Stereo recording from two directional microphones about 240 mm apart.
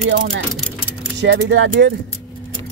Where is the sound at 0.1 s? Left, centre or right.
Right.